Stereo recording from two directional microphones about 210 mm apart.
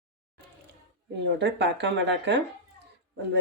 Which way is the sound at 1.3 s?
55° right (ahead or behind).